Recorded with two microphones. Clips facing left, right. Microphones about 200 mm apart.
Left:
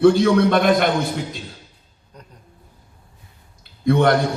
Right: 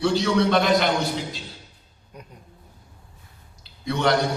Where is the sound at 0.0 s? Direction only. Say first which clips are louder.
Left 7 dB; 50° left (ahead or behind).